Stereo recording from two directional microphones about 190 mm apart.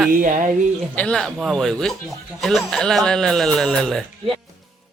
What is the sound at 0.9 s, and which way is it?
Speech, 5° left (ahead or behind).